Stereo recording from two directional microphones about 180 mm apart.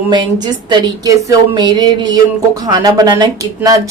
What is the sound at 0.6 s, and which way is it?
Speech, 20° right (ahead or behind).